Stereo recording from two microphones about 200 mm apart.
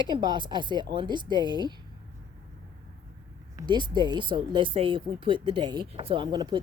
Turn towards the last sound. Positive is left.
turn(degrees=-20)  # may be behind; listen again after turning